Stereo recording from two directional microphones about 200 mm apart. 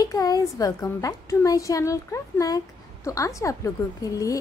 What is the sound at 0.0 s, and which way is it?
A woman's voice, 20° left (ahead or behind).